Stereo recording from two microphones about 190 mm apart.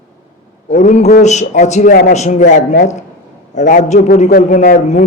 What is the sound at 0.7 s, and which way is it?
A man's voice, 40° left (ahead or behind).